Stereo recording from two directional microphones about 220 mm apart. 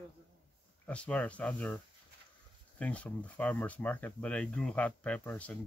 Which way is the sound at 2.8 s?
5° left (ahead or behind).